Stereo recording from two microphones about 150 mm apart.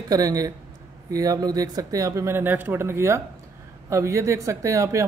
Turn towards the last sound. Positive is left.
turn(degrees=-20)  # may be behind; listen again after turning